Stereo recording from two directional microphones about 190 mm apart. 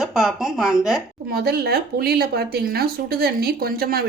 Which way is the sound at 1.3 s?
55° right (ahead or behind).